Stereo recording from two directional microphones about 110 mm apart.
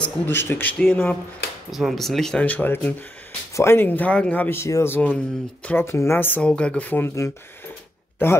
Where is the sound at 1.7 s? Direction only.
Centre (ahead or behind).